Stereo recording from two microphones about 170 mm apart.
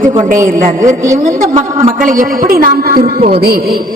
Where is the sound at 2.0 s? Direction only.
55° right (ahead or behind).